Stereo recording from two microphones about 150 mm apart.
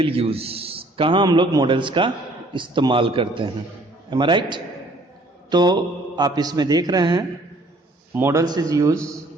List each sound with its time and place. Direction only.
0.0 s a man's voice: 40° right (ahead or behind); by 9.0 s 25° right (ahead or behind)